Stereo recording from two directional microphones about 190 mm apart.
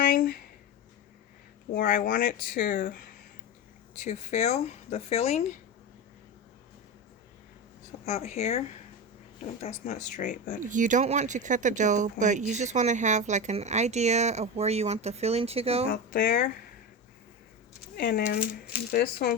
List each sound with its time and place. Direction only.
0.0 s a sound: 45° left (ahead or behind)
1.7 s speech: 50° left (ahead or behind)
3.9 s speech: 40° left (ahead or behind)
8.0 s speech: 35° left (ahead or behind)
10.6 s speech: 40° right (ahead or behind)
15.9 s speech: 50° left (ahead or behind)
17.9 s speech: 55° left (ahead or behind)